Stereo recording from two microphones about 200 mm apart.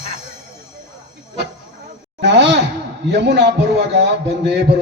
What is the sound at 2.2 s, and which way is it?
Sigh, 60° right (ahead or behind).